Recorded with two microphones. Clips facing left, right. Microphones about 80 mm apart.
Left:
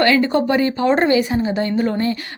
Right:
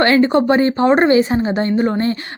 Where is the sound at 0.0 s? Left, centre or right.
Right.